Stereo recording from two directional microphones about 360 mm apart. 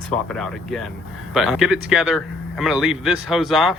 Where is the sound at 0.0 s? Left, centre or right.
Centre.